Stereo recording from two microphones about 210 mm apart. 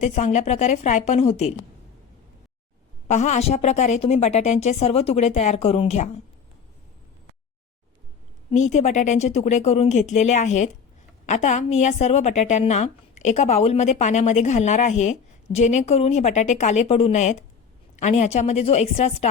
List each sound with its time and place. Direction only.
0.0 s a woman's voice: 35° left (ahead or behind)
3.1 s a woman's voice: 35° left (ahead or behind)
8.4 s a woman's voice: 35° left (ahead or behind)